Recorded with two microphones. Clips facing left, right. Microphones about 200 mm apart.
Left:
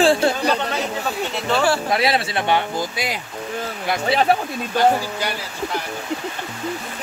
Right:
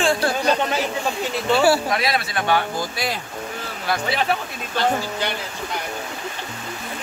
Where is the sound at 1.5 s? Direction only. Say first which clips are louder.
Right 3 dB; 10° right (ahead or behind).